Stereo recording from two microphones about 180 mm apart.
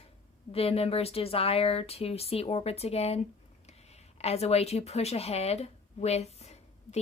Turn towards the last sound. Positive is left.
turn(degrees=35)  # may be behind; listen again after turning